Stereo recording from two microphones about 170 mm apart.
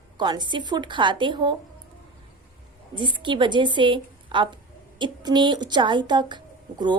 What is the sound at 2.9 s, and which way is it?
A woman's voice, 30° right (ahead or behind).